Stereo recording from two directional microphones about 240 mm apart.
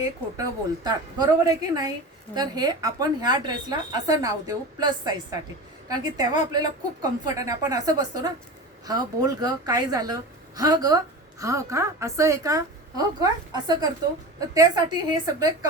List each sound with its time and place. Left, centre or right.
0.9 s a woman's voice: centre